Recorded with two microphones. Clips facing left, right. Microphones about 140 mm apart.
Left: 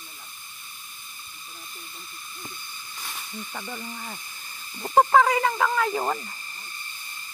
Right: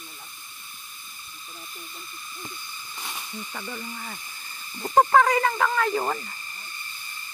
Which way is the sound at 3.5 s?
10° left (ahead or behind).